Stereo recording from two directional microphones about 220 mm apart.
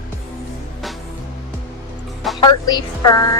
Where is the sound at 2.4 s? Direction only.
20° left (ahead or behind).